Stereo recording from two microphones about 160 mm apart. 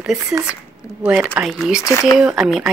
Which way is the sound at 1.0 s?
10° right (ahead or behind).